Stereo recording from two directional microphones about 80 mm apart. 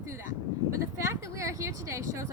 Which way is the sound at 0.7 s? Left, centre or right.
Right.